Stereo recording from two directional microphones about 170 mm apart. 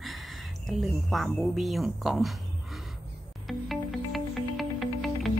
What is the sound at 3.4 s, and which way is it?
Music, centre (ahead or behind).